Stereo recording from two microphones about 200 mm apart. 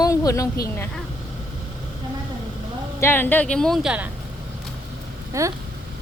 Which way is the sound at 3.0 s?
10° left (ahead or behind).